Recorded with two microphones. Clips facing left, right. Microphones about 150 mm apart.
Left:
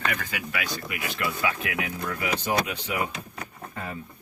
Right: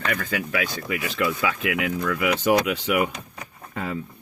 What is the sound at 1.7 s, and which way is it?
Speech, 90° right.